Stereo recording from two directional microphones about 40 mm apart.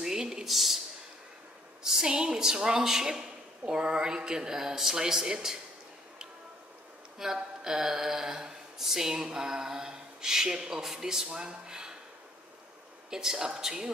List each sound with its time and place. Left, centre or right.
0.0 s a sound: centre
1.8 s speech: centre
7.2 s speech: centre
13.1 s speech: centre